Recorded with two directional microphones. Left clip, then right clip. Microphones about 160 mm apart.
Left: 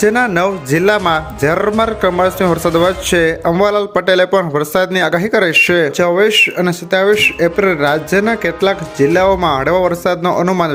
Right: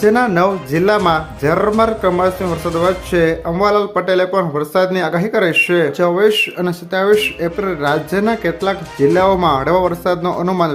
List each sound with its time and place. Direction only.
0.0 s speech: 25° left (ahead or behind)
6.0 s speech: 15° left (ahead or behind)